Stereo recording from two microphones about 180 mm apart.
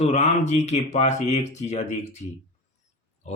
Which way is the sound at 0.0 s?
40° left (ahead or behind).